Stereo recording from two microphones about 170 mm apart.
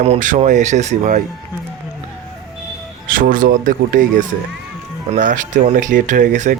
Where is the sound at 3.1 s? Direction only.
55° right (ahead or behind).